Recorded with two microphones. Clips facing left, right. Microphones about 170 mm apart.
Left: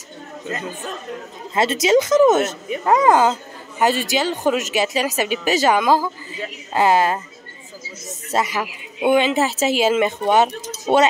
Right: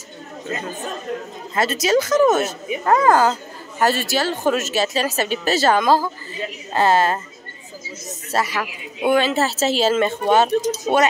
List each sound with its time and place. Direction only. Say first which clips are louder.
1.5 s speech: left 2 dB; 25° left (ahead or behind)
8.3 s speech: left 1 dB; 20° left (ahead or behind)